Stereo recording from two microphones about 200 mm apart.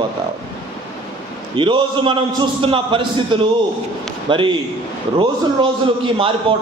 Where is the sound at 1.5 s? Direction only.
25° right (ahead or behind).